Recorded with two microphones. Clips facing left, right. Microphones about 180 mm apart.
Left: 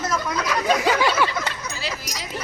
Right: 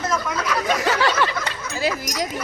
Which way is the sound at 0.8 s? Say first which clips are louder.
Even; 10° left (ahead or behind).